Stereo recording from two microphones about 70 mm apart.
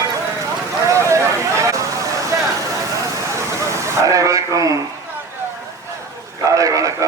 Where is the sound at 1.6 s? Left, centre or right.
Right.